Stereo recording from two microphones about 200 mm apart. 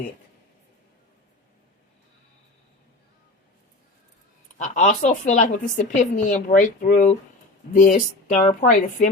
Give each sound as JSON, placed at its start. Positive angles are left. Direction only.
{"t": 4.5, "sound": "a woman's voice", "side_deg": 40}